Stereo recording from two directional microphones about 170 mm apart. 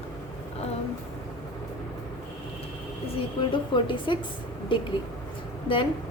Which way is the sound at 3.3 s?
30° left (ahead or behind).